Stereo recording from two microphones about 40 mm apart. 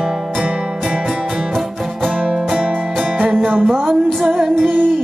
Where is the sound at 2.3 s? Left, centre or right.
Centre.